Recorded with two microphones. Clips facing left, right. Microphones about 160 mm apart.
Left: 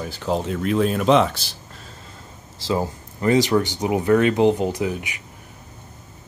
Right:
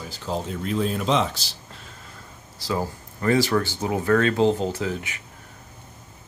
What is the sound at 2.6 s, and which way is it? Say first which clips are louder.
Speech: left 4 dB; 20° left (ahead or behind).